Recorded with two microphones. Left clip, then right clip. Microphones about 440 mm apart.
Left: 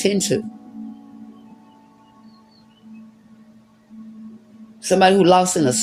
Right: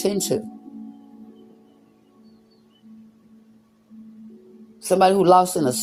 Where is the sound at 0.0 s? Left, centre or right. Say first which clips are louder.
Left 3 dB; right.